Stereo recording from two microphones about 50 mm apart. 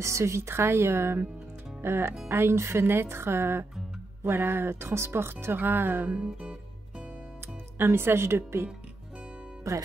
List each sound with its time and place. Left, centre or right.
0.0 s a woman's voice: right
2.8 s a woman's voice: right
6.0 s music: right
7.8 s a woman's voice: right
9.7 s speech: right